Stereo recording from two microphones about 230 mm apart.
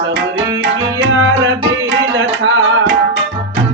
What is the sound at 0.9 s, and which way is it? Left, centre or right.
Tabla, right.